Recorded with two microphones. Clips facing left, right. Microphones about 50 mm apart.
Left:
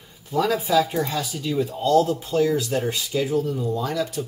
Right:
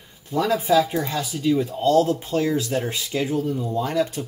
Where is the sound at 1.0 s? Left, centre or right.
Centre.